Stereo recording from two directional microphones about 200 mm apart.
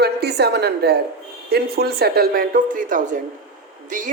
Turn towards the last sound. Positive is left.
turn(degrees=-40)  # may be behind; listen again after turning